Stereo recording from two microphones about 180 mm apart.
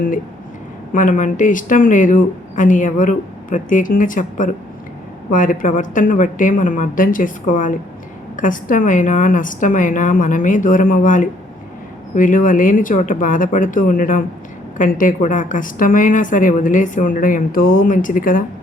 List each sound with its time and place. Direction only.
0.9 s a woman's voice: 45° left (ahead or behind)